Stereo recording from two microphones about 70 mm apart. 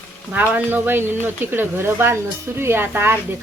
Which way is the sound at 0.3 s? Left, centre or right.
Right.